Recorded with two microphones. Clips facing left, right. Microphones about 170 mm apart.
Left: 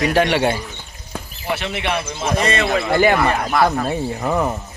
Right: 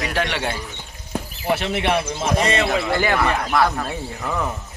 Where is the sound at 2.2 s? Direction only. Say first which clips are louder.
Even; 15° right (ahead or behind).